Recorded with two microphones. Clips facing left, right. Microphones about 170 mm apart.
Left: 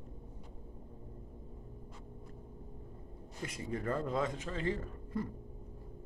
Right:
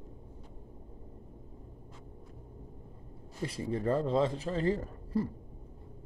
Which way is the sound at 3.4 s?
30° right (ahead or behind).